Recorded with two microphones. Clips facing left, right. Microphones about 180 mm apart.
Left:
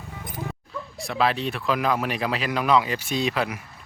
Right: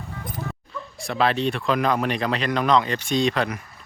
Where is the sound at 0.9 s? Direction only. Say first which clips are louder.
Right 2 dB; centre (ahead or behind).